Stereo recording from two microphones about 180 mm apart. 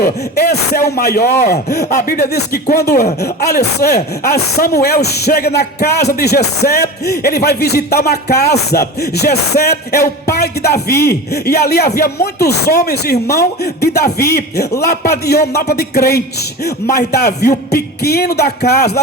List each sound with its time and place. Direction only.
0.0 s speech: 60° left (ahead or behind)